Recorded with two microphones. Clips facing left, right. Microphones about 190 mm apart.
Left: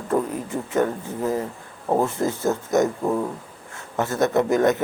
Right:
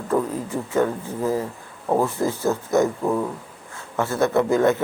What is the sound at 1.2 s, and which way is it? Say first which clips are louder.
Speech: right 1 dB; 10° right (ahead or behind).